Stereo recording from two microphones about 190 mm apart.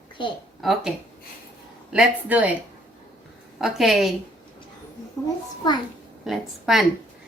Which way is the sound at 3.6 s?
Centre (ahead or behind).